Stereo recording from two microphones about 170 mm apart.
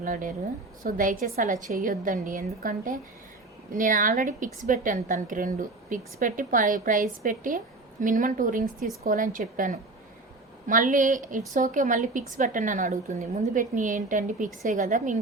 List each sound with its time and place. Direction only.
0.0 s a woman's voice: 50° right (ahead or behind)